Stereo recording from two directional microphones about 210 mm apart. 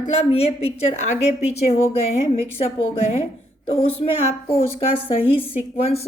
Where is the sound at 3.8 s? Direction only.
30° left (ahead or behind).